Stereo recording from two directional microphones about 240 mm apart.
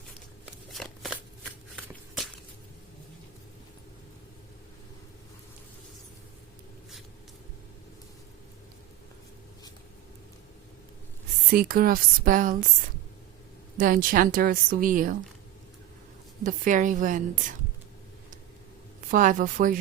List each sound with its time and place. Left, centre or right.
0.7 s shuffling cards: centre
1.7 s shuffle: centre
11.5 s a woman's voice: right
13.7 s a woman's voice: right
16.4 s a woman's voice: right
19.1 s a woman's voice: right